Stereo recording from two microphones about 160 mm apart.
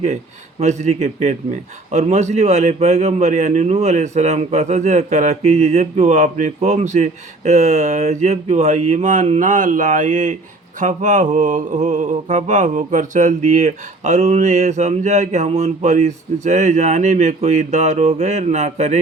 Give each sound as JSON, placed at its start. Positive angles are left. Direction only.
{"t": 0.6, "sound": "a man's voice", "side_deg": -45}